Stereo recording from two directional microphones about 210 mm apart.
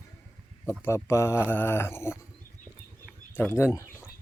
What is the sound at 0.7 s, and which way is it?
Speech, 10° left (ahead or behind).